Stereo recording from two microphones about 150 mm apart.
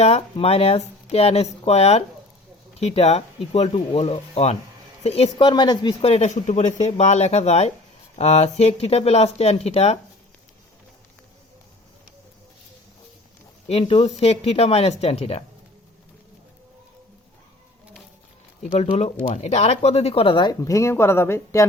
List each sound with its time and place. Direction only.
0.0 s speech: 45° left (ahead or behind)
6.0 s speech: 45° left (ahead or behind)
13.7 s speech: 40° left (ahead or behind)
18.9 s speech: 45° left (ahead or behind); by 21.7 s 20° left (ahead or behind)